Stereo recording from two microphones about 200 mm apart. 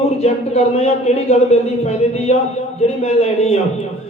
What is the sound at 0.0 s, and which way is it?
A man's voice, 30° left (ahead or behind).